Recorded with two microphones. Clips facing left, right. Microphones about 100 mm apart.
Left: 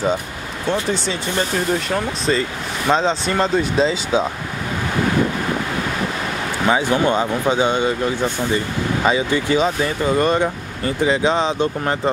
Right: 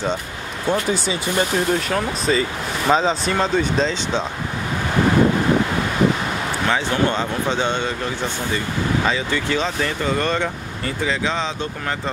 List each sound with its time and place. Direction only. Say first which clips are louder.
0.7 s speech: even; 5° right (ahead or behind)
6.7 s speech: left 4 dB; 10° left (ahead or behind)